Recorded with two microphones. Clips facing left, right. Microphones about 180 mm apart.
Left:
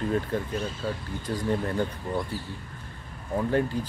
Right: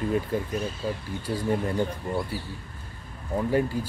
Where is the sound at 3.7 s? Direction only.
5° right (ahead or behind).